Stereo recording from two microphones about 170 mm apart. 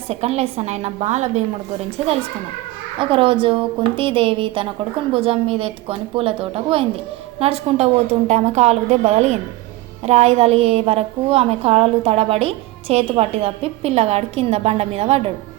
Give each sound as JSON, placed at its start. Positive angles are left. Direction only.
{"t": 0.1, "sound": "a woman's voice", "side_deg": -40}
{"t": 3.0, "sound": "a woman's voice", "side_deg": -30}